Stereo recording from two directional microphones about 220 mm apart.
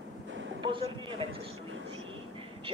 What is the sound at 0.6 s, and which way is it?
Speech, 20° right (ahead or behind).